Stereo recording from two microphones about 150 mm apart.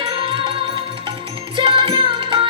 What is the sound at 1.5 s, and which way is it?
Music, 35° right (ahead or behind).